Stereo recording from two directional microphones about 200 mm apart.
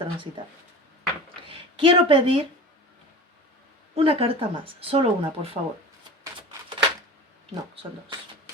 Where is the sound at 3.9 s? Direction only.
30° right (ahead or behind).